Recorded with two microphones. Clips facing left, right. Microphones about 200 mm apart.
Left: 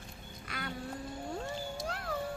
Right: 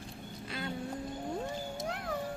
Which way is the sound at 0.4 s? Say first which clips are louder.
Right 3 dB; 25° right (ahead or behind).